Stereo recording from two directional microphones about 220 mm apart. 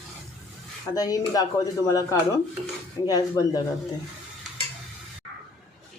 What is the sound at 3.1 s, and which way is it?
Speech, 15° left (ahead or behind).